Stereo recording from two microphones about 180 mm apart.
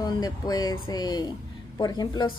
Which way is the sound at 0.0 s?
20° left (ahead or behind).